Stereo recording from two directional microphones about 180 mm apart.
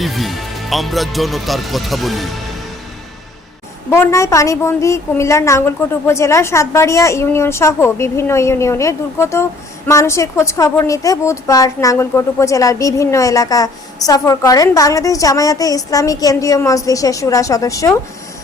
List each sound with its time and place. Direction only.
0.0 s speech: centre (ahead or behind)
3.8 s a woman's voice: 15° left (ahead or behind)